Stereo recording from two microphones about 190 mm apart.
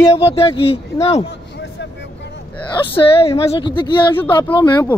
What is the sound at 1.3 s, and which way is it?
Vehicle, 65° left (ahead or behind).